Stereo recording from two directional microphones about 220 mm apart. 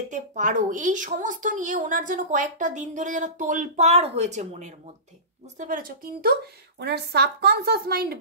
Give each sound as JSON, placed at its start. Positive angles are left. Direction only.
{"t": 0.1, "sound": "a woman's voice", "side_deg": -35}